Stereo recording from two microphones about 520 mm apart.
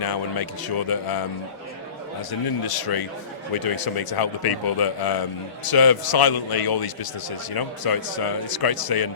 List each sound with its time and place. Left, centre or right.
0.0 s a man's voice: left
2.6 s a man's voice: left